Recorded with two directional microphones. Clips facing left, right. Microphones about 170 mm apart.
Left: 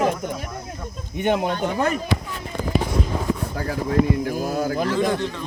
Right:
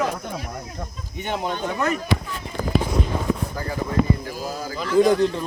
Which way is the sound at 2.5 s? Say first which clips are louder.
Even; 50° left (ahead or behind).